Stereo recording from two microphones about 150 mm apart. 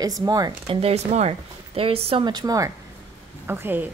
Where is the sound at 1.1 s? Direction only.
45° right (ahead or behind); by 2.7 s 25° right (ahead or behind).